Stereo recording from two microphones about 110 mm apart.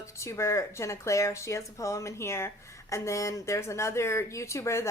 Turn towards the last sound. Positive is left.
turn(degrees=25)  # may be behind; listen again after turning